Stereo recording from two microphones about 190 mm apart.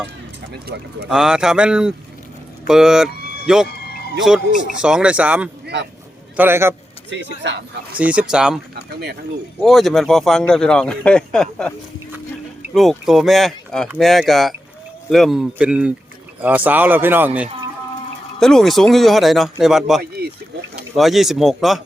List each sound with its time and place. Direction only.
1.0 s speech: 5° right (ahead or behind)
3.2 s a sound: 55° left (ahead or behind)
3.4 s speech: 5° right (ahead or behind)
3.7 s vehicle: 55° left (ahead or behind)
4.8 s speech: 5° right (ahead or behind)
5.6 s speech: 60° right (ahead or behind)
6.3 s speech: 10° right (ahead or behind)
7.1 s speech: 70° right (ahead or behind)
7.9 s speech: 5° right (ahead or behind)
8.7 s speech: 55° right (ahead or behind)
9.6 s speech: centre (ahead or behind)
12.7 s speech: centre (ahead or behind)
18.3 s speech: centre (ahead or behind)